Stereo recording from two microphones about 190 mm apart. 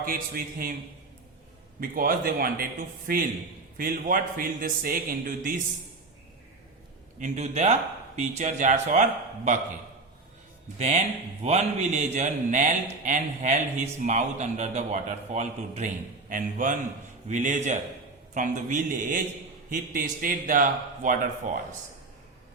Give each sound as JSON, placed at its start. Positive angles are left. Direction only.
{"t": 0.0, "sound": "a man's voice", "side_deg": -50}
{"t": 1.8, "sound": "a man's voice", "side_deg": -50}
{"t": 7.2, "sound": "speech", "side_deg": -35}
{"t": 10.8, "sound": "a man's voice", "side_deg": -35}